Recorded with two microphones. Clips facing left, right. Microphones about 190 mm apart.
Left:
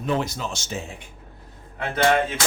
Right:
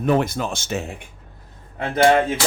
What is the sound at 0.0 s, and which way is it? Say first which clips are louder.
Speech: right 6 dB; 60° right (ahead or behind).